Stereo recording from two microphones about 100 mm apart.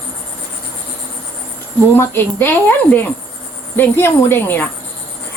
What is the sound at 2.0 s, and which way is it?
Speech, 20° left (ahead or behind).